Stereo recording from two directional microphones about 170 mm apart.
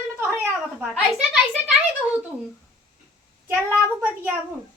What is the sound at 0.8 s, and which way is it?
Speech, 5° right (ahead or behind).